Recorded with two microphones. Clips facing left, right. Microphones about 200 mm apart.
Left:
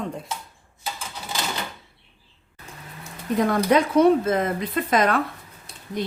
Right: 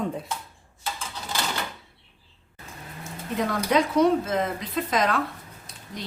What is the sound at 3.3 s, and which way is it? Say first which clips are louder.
Speech: left 4 dB; 55° left (ahead or behind).